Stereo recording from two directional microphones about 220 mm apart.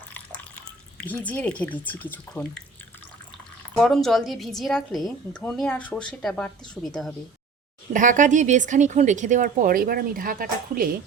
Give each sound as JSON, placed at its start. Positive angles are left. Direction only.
{"t": 0.1, "sound": "drip", "side_deg": 5}
{"t": 2.1, "sound": "a woman's voice", "side_deg": 5}
{"t": 3.8, "sound": "a woman's voice", "side_deg": 0}
{"t": 7.9, "sound": "speech", "side_deg": -35}